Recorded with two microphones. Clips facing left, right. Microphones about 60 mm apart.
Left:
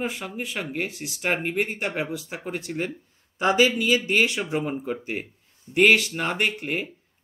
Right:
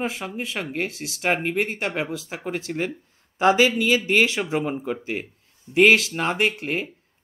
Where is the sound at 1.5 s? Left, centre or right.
Centre.